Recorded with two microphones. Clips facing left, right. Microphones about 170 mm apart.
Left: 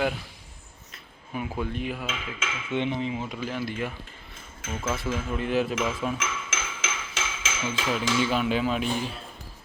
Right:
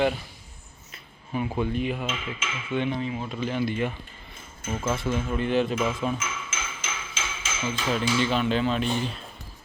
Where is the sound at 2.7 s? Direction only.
20° left (ahead or behind).